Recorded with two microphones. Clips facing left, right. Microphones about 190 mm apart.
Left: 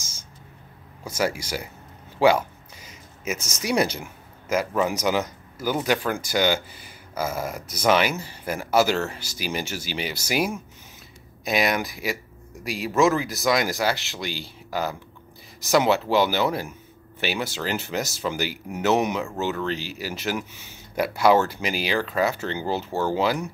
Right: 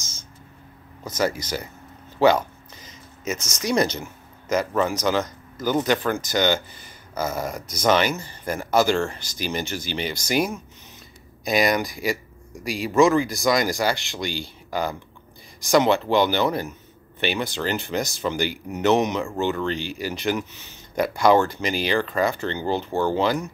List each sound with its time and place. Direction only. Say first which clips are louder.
1.0 s speech: right 1 dB; 10° left (ahead or behind)
2.1 s a sound: right 1 dB; 10° left (ahead or behind)
3.3 s speech: right 1 dB; 35° left (ahead or behind)
3.6 s speech: right 1 dB; 10° left (ahead or behind)